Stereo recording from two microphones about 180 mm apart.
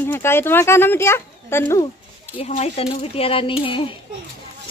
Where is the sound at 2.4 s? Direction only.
35° left (ahead or behind).